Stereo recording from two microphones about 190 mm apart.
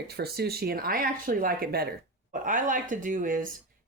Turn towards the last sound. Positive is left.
turn(degrees=-45)  # may be behind; listen again after turning